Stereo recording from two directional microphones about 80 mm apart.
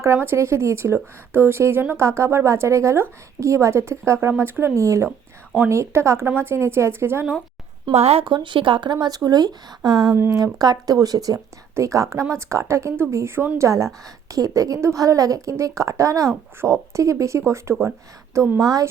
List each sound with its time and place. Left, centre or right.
0.0 s a woman's voice: right
7.9 s speech: right
10.2 s a woman's voice: right
18.6 s a woman's voice: right